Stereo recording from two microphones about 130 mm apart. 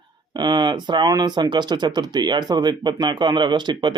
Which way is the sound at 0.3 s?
35° right (ahead or behind).